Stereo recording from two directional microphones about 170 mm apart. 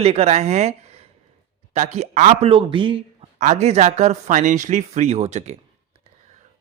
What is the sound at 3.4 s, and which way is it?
Speech, 40° right (ahead or behind).